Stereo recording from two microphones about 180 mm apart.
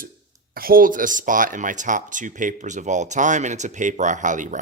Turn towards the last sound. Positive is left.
turn(degrees=-45)  # may be behind; listen again after turning